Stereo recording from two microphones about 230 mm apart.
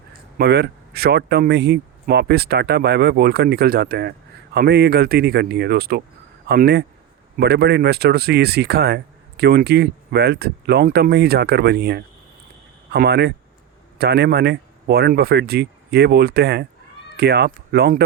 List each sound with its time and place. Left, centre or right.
0.3 s speech: right